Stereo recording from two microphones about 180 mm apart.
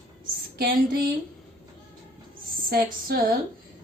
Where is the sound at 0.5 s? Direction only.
60° right (ahead or behind).